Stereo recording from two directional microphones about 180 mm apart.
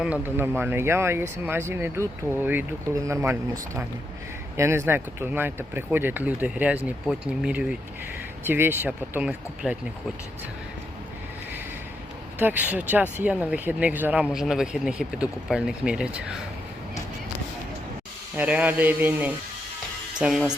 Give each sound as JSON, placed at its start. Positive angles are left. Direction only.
{"t": 0.0, "sound": "speech", "side_deg": -10}
{"t": 12.4, "sound": "speech", "side_deg": -10}
{"t": 18.3, "sound": "speech", "side_deg": -10}